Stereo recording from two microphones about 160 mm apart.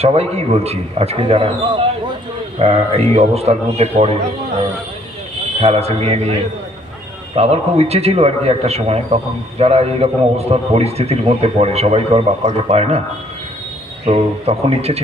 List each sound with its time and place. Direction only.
0.0 s a man's voice: 40° right (ahead or behind)
5.6 s a man's voice: 40° right (ahead or behind)
7.3 s a man's voice: 40° right (ahead or behind)
14.0 s a man's voice: 40° right (ahead or behind)